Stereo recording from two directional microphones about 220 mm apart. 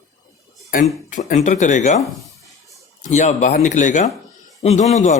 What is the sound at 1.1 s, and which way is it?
Speech, 35° left (ahead or behind).